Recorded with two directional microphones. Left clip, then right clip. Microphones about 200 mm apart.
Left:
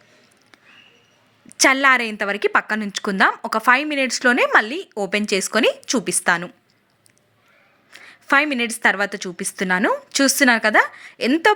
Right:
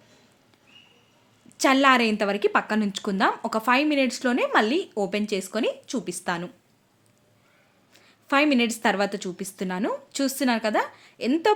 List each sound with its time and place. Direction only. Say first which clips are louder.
1.5 s a woman's voice: left 4 dB; 15° left (ahead or behind)
7.9 s a woman's voice: left 5 dB; 10° left (ahead or behind)